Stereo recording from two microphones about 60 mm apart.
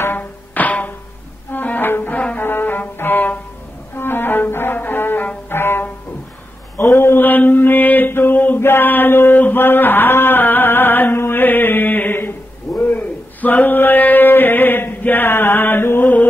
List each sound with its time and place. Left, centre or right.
0.0 s music: left
2.1 s music: left
2.4 s music: left
3.9 s cello: left
5.5 s music: left
6.8 s mantra: left
9.4 s a sound: left